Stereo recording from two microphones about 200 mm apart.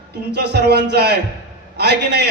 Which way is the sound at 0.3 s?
55° right (ahead or behind).